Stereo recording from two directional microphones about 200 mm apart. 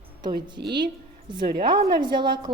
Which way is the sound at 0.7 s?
20° right (ahead or behind).